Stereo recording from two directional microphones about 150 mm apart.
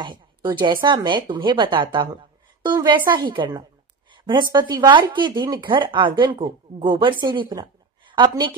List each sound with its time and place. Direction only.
0.0 s a woman's voice: 30° right (ahead or behind)